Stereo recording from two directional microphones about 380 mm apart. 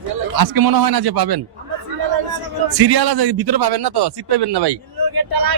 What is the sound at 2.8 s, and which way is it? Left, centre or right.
Speech, right.